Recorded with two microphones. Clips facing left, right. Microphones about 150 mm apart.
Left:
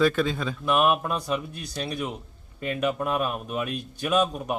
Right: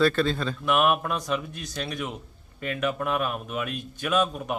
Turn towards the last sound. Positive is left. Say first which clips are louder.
# left 1 dB
turn(degrees=15)  # may be behind; listen again after turning